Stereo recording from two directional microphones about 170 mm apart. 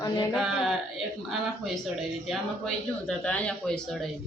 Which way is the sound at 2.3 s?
5° left (ahead or behind).